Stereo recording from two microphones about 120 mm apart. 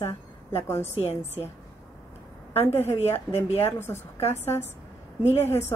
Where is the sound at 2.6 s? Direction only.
20° left (ahead or behind).